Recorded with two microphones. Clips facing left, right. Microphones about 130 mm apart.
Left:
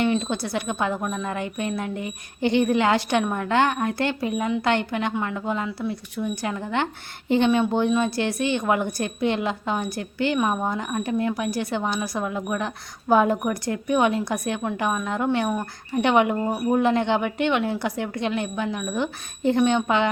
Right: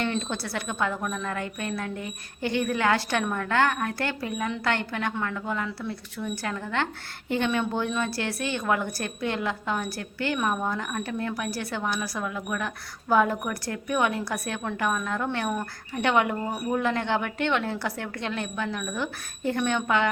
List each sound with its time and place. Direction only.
0.0 s a woman's voice: 15° left (ahead or behind)